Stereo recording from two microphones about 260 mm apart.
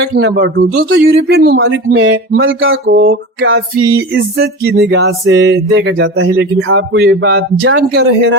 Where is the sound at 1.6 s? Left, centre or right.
Right.